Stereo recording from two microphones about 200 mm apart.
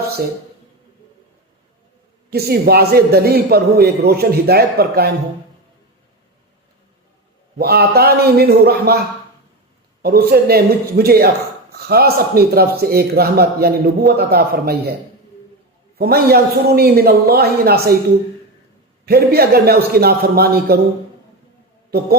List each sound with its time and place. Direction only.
2.3 s a man's voice: 50° right (ahead or behind)
7.6 s a man's voice: 50° right (ahead or behind)
10.0 s a man's voice: 50° right (ahead or behind)
16.0 s a man's voice: 50° right (ahead or behind)
19.0 s a man's voice: 50° right (ahead or behind)